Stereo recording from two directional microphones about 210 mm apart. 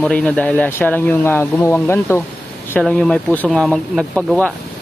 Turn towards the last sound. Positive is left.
turn(degrees=5)  # may be behind; listen again after turning